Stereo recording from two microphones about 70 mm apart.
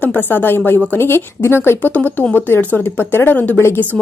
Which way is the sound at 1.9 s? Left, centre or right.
Left.